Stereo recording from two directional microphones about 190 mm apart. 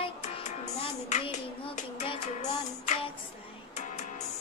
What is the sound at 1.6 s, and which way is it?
Music, 35° left (ahead or behind).